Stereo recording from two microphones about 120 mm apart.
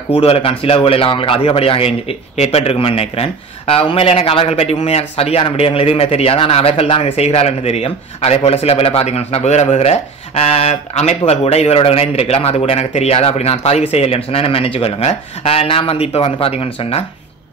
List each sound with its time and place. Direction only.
0.1 s a man's voice: 55° left (ahead or behind)